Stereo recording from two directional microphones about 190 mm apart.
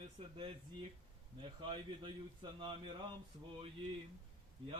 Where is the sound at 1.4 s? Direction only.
25° right (ahead or behind).